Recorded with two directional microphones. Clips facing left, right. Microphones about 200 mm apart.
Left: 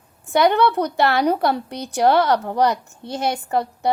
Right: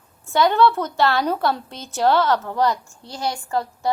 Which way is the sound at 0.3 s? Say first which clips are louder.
Left 1 dB; 15° left (ahead or behind).